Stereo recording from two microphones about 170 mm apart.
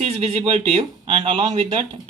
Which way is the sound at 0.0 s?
40° right (ahead or behind).